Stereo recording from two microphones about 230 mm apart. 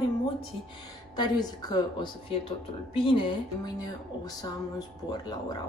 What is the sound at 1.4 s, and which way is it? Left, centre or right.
Speech, centre.